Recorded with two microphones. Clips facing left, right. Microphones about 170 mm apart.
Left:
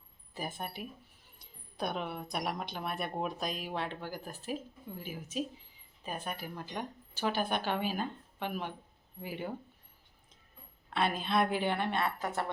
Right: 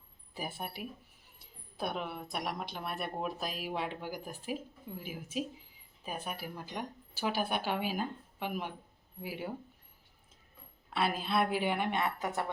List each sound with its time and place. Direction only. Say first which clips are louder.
0.3 s a woman's voice: left 1 dB; 10° right (ahead or behind)
10.8 s a woman's voice: left 1 dB; 5° right (ahead or behind)